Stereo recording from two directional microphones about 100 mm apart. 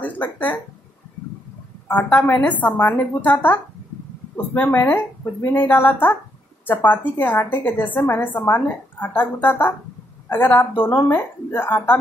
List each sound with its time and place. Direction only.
0.0 s a sound: 15° left (ahead or behind)
1.9 s a woman's voice: 15° left (ahead or behind)
4.6 s a woman's voice: 20° left (ahead or behind)